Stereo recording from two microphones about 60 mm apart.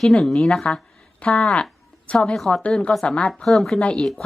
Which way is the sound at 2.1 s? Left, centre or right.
Left.